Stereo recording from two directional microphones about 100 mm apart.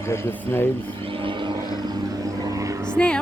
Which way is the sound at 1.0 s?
60° right (ahead or behind).